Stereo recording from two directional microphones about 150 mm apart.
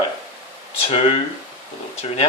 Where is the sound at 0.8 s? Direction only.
40° left (ahead or behind).